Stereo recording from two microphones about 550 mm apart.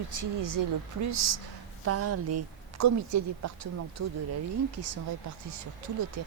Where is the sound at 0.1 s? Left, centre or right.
Right.